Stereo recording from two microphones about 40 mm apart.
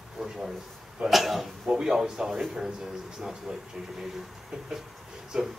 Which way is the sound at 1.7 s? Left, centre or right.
Centre.